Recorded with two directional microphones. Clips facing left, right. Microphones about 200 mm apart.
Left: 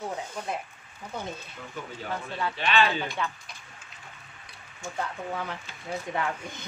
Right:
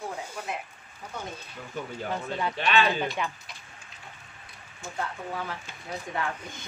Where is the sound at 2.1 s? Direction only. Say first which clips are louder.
Right 1 dB; 20° right (ahead or behind).